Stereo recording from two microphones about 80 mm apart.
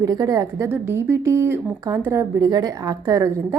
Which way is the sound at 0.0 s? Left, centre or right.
Right.